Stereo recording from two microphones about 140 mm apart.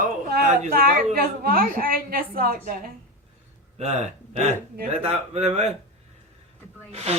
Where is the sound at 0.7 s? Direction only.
90° right.